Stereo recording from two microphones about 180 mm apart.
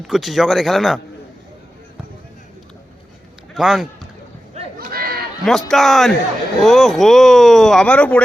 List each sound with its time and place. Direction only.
0.1 s speech: centre (ahead or behind)
3.5 s a man's voice: centre (ahead or behind)
4.6 s a sound: 35° right (ahead or behind)
4.9 s chatter: 55° right (ahead or behind)
5.5 s speech: centre (ahead or behind)